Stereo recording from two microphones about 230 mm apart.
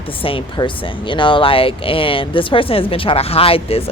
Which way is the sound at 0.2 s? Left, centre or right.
Left.